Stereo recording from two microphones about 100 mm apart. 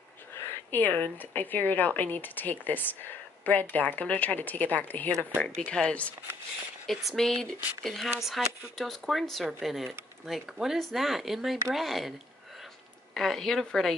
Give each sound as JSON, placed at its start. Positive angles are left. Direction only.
{"t": 0.5, "sound": "speech", "side_deg": 20}
{"t": 13.1, "sound": "speech", "side_deg": 0}